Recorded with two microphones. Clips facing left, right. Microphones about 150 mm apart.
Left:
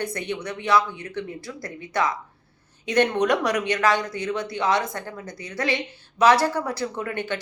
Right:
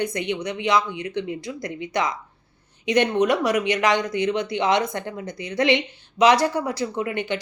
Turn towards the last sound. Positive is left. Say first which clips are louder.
# right 3 dB
turn(degrees=-15)  # may be behind; listen again after turning